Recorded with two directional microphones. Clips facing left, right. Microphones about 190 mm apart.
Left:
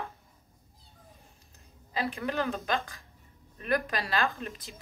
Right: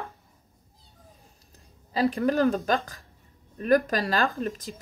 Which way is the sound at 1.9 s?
40° right (ahead or behind).